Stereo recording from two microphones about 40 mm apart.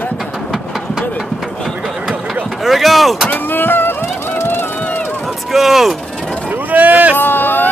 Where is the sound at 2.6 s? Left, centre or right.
Centre.